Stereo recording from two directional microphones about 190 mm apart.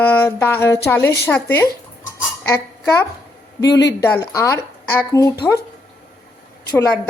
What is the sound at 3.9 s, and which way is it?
A woman's voice, 20° left (ahead or behind).